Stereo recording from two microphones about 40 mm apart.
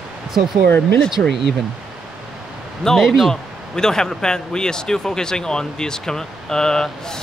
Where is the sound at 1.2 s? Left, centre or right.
Left.